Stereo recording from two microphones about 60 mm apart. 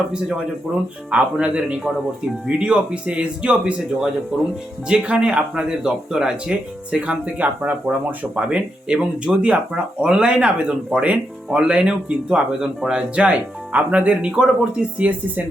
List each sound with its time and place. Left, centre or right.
1.1 s speech: centre